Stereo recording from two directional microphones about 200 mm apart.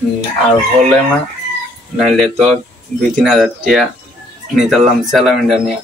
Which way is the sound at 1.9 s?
Centre (ahead or behind).